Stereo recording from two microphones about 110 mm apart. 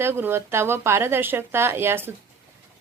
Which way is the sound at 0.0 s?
20° right (ahead or behind).